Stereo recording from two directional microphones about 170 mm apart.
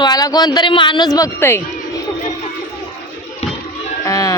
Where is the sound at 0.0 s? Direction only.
20° left (ahead or behind).